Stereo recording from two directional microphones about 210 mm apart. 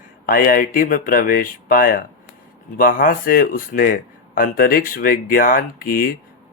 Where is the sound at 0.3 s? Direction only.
40° left (ahead or behind).